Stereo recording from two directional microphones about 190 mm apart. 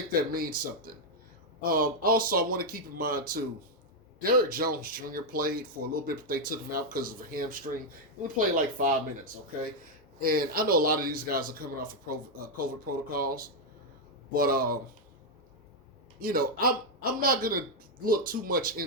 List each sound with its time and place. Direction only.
0.1 s speech: 50° right (ahead or behind)
16.2 s speech: 50° right (ahead or behind)